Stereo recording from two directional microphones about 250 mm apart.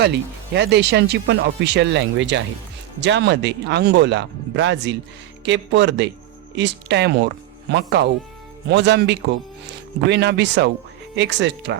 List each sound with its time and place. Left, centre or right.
0.0 s speech: right